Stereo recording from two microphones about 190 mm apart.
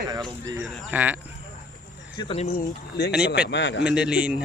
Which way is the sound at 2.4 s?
35° left (ahead or behind).